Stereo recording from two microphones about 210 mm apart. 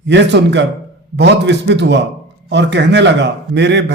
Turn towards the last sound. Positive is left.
turn(degrees=-55)  # may be behind; listen again after turning